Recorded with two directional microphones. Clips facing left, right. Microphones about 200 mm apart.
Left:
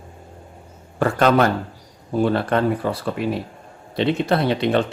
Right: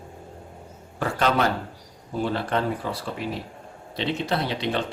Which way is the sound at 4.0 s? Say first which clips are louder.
Left 7 dB; 55° left (ahead or behind).